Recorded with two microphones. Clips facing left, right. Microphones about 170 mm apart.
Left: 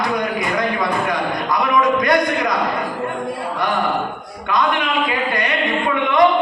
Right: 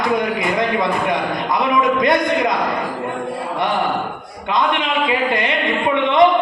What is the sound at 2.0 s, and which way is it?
Speech, 25° right (ahead or behind).